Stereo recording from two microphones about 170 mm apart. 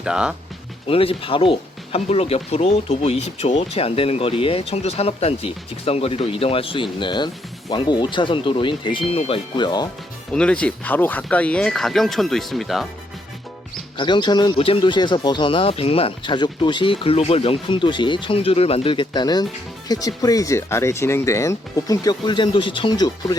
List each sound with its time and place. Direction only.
0.0 s speech: 5° right (ahead or behind)
0.9 s speech: 35° left (ahead or behind)
10.3 s speech: 5° left (ahead or behind)
13.9 s speech: 25° left (ahead or behind)